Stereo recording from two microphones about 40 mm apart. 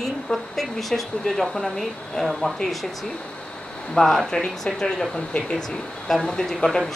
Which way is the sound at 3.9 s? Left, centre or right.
Centre.